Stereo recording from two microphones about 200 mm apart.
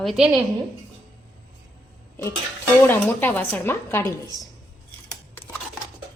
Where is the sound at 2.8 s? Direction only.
10° left (ahead or behind).